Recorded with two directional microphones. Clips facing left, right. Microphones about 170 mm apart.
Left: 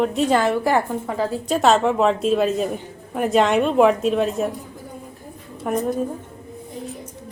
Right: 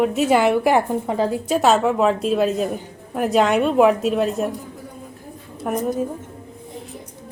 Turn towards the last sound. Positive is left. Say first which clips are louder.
# even
turn(degrees=0)  # may be behind; listen again after turning